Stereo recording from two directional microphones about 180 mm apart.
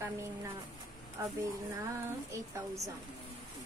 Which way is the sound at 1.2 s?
15° right (ahead or behind).